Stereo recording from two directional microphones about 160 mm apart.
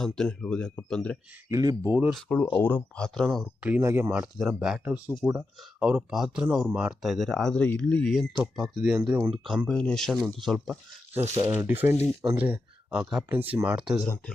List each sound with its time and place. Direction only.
0.0 s speech: 5° left (ahead or behind)
1.5 s speech: 20° right (ahead or behind)
2.0 s speech: 5° left (ahead or behind)
3.7 s speech: 15° right (ahead or behind)
11.1 s speech: 15° right (ahead or behind)